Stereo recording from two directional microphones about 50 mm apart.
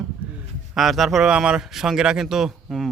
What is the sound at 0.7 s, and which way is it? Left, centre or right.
Speech, centre.